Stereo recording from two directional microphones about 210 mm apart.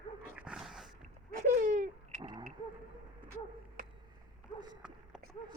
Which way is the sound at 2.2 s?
20° right (ahead or behind).